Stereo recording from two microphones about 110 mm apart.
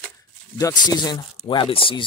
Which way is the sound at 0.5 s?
35° left (ahead or behind).